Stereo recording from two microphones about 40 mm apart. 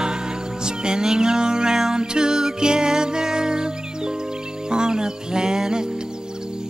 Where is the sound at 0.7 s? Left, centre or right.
Centre.